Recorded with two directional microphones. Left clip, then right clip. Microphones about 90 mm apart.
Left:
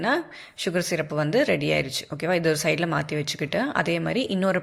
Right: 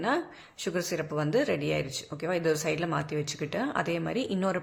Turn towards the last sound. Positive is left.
turn(degrees=30)  # may be behind; listen again after turning